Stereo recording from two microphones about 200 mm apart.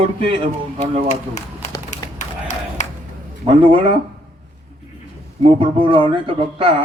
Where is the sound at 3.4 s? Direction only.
25° right (ahead or behind).